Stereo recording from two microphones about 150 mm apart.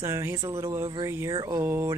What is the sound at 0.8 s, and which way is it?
Speech, 30° right (ahead or behind).